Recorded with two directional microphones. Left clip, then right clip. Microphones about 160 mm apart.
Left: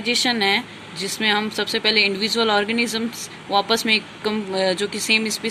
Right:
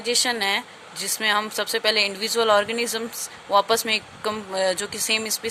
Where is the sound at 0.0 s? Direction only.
55° right (ahead or behind).